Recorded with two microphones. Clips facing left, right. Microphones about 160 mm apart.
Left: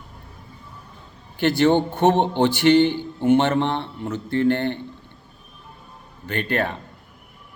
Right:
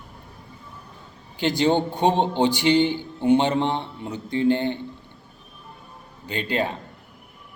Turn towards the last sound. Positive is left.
turn(degrees=-15)  # may be behind; listen again after turning